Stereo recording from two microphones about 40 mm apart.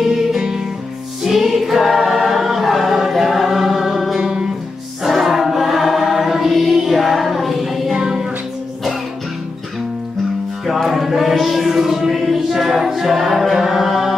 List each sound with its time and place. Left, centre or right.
0.4 s music: centre
1.2 s choir: centre
4.2 s music: centre
5.0 s choir: centre
7.9 s music: centre
10.7 s music: centre
13.6 s a capella: centre